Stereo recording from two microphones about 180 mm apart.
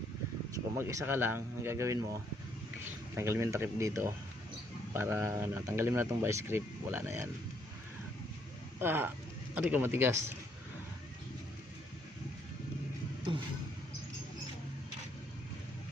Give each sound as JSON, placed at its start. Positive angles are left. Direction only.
{"t": 0.5, "sound": "speech", "side_deg": -15}
{"t": 3.2, "sound": "speech", "side_deg": -15}
{"t": 8.8, "sound": "speech", "side_deg": -10}